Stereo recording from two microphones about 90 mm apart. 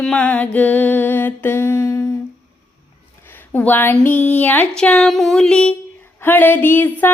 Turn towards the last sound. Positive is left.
turn(degrees=20)  # may be behind; listen again after turning